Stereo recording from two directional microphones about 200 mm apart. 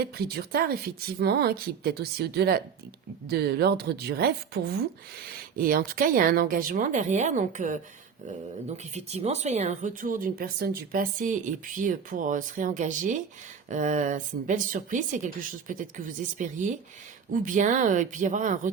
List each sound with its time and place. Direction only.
0.0 s speech: 50° right (ahead or behind)